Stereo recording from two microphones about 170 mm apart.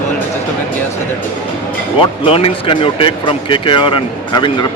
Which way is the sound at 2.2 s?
30° left (ahead or behind).